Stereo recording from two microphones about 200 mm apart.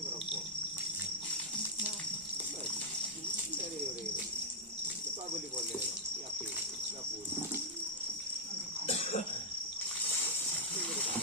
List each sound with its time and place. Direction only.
8.9 s cough: 30° left (ahead or behind)